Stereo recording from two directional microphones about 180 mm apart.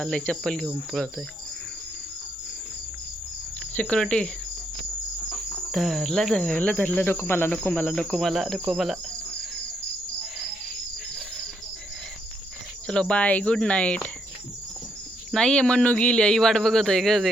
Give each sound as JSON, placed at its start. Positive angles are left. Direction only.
{"t": 0.0, "sound": "speech", "side_deg": 5}
{"t": 3.8, "sound": "speech", "side_deg": 5}
{"t": 5.7, "sound": "speech", "side_deg": 0}
{"t": 12.9, "sound": "speech", "side_deg": 5}
{"t": 15.3, "sound": "speech", "side_deg": 5}